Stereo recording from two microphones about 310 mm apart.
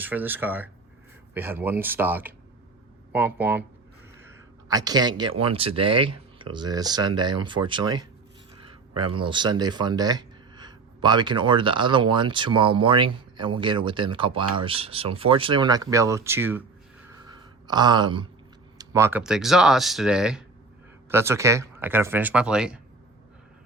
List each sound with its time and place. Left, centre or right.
0.0 s speech: centre
4.7 s speech: centre
17.7 s speech: centre